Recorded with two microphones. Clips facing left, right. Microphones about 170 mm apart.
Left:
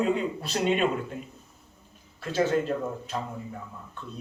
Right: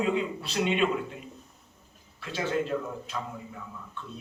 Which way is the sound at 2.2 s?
45° left (ahead or behind).